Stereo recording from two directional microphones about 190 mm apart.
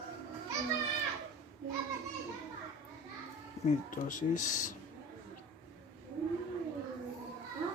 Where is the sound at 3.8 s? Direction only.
45° left (ahead or behind).